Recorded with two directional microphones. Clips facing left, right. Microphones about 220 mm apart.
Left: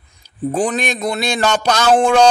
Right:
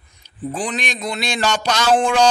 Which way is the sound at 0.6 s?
55° left (ahead or behind).